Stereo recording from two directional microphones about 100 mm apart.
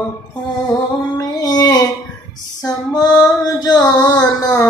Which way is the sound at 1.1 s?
40° left (ahead or behind).